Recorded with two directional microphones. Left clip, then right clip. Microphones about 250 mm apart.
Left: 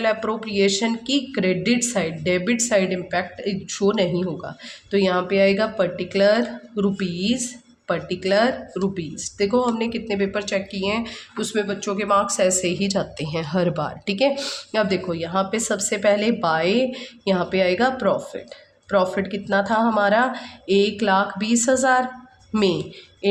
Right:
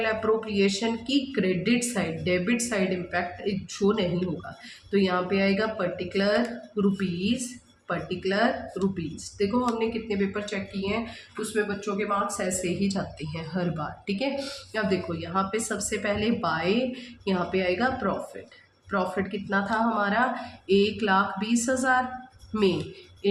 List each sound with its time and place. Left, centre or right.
0.0 s speech: left